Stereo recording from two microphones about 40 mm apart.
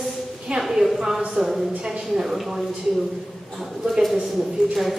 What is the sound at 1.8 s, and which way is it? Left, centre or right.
Speech, centre.